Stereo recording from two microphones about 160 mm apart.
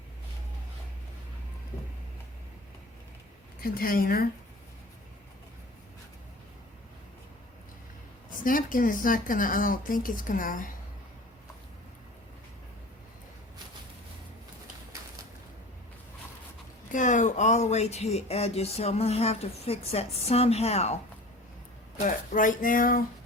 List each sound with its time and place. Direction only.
3.6 s a woman's voice: 65° left (ahead or behind)
8.4 s speech: 60° left (ahead or behind)
16.9 s speech: 50° left (ahead or behind)
22.0 s speech: 55° left (ahead or behind)